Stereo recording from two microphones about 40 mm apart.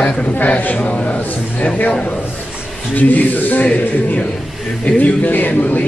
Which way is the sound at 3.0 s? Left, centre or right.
Left.